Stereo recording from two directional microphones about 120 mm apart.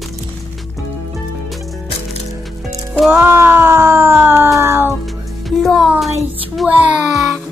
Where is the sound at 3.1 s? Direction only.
15° right (ahead or behind).